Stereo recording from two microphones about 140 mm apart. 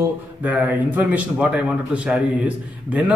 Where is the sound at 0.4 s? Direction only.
10° right (ahead or behind).